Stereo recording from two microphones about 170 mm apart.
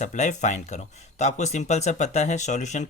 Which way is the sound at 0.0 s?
45° left (ahead or behind).